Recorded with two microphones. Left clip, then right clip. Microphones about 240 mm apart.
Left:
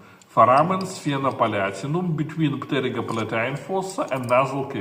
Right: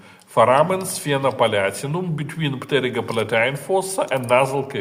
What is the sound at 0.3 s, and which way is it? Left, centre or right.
Speech, right.